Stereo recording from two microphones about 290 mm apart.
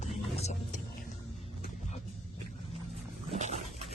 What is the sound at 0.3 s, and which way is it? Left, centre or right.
Vehicle, left.